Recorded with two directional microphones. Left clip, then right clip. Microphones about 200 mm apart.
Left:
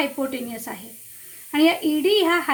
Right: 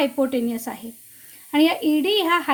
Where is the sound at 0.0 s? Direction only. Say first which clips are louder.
Right 4 dB; 40° right (ahead or behind).